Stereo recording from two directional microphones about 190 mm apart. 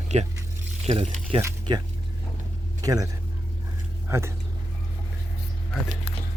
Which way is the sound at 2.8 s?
20° right (ahead or behind).